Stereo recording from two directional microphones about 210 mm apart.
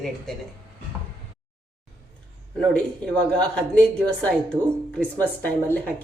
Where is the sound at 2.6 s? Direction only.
5° left (ahead or behind).